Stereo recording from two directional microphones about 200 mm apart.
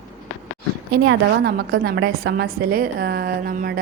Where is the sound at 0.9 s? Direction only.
55° right (ahead or behind).